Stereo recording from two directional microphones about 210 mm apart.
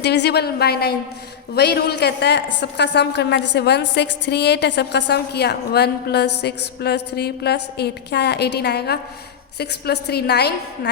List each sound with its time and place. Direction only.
0.0 s a woman's voice: 55° left (ahead or behind)